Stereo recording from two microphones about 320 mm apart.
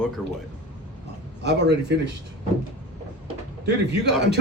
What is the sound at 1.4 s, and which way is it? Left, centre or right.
Speech, right.